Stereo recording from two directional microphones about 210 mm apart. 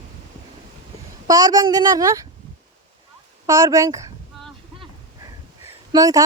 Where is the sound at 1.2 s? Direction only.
15° right (ahead or behind).